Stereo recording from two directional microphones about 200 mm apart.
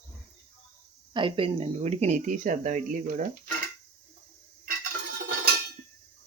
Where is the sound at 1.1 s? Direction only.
25° right (ahead or behind).